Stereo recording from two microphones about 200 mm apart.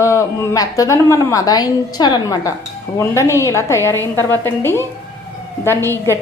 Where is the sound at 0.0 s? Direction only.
15° left (ahead or behind).